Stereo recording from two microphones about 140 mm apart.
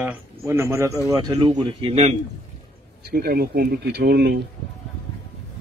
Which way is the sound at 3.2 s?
90° right.